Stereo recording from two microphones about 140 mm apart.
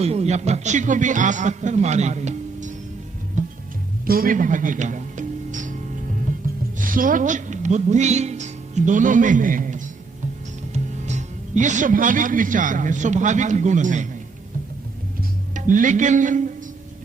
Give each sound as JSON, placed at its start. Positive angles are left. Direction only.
{"t": 0.0, "sound": "a man's voice", "side_deg": -50}
{"t": 3.4, "sound": "music", "side_deg": -60}
{"t": 4.0, "sound": "music", "side_deg": -90}
{"t": 6.7, "sound": "speech", "side_deg": -75}
{"t": 11.0, "sound": "a man's voice", "side_deg": -60}
{"t": 15.5, "sound": "music", "side_deg": -70}